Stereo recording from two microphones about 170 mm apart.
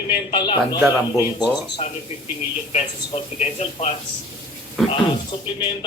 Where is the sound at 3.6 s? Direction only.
35° left (ahead or behind).